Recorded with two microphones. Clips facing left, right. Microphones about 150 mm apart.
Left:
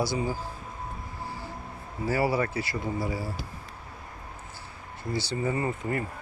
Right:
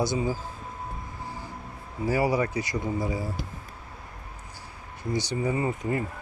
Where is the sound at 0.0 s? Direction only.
20° right (ahead or behind).